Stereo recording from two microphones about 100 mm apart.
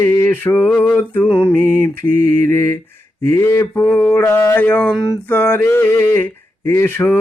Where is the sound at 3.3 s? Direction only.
25° left (ahead or behind).